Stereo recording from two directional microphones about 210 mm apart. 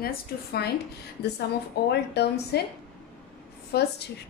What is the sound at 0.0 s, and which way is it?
Speech, 50° left (ahead or behind).